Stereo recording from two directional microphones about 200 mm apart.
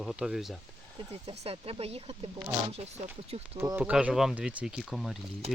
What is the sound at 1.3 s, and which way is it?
Speech, 30° right (ahead or behind).